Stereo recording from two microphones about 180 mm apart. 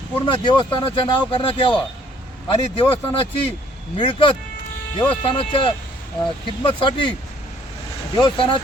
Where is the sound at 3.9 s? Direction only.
25° left (ahead or behind).